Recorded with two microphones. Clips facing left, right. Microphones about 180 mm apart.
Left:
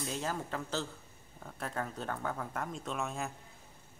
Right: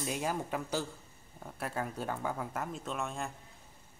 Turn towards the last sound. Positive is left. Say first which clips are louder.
# even
turn(degrees=0)  # may be behind; listen again after turning